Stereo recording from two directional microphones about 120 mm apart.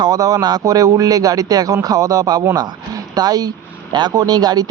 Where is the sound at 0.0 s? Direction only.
30° right (ahead or behind).